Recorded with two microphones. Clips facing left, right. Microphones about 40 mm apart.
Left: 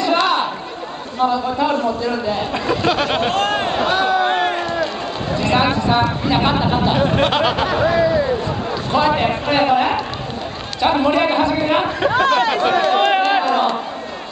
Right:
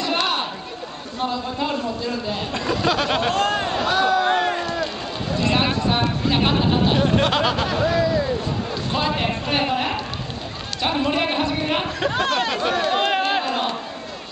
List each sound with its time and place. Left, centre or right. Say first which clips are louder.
0.0 s a sound: left 6 dB; centre
1.2 s a man's voice: left 7 dB; centre
3.3 s speech: left 3 dB; left
4.6 s run: left 4 dB; centre
5.4 s a man's voice: left 4 dB; centre; by 8.3 s left
8.9 s a man's voice: left 7 dB; centre; by 13.0 s left
13.0 s a sound: left 5 dB; centre